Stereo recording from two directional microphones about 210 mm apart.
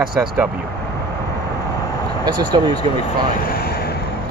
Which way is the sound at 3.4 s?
50° left (ahead or behind).